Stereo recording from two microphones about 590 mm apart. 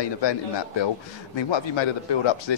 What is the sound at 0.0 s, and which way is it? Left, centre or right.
A man's voice, left.